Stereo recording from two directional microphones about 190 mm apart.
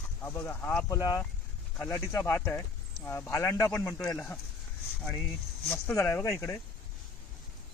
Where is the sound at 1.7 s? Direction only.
5° left (ahead or behind).